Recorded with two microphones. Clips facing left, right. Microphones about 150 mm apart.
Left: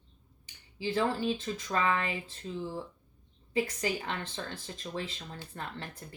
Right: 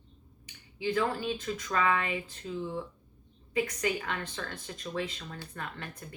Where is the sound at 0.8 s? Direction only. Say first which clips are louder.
Even; 30° left (ahead or behind).